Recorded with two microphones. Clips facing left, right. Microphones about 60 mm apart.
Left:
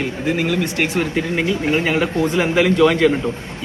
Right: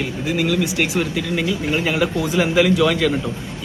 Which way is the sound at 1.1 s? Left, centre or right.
Left.